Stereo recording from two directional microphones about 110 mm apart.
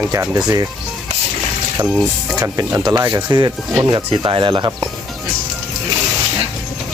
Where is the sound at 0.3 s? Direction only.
40° right (ahead or behind).